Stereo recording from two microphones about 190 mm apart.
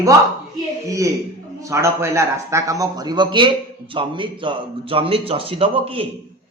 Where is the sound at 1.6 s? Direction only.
15° right (ahead or behind).